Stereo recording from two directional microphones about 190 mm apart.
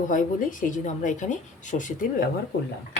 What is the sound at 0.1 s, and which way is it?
Speech, 45° left (ahead or behind).